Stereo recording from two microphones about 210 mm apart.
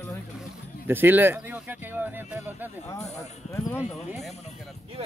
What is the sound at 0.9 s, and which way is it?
Speech, 10° right (ahead or behind).